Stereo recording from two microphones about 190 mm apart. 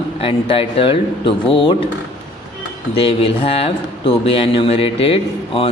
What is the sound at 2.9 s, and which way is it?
Speech, 30° left (ahead or behind).